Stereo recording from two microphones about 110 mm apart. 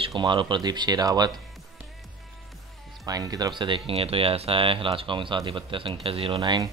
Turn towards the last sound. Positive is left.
turn(degrees=-40)  # may be behind; listen again after turning